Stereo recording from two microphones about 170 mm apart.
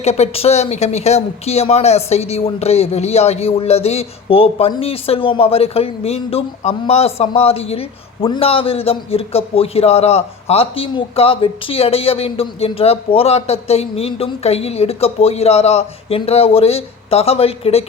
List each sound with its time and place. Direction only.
0.0 s speech: 40° left (ahead or behind)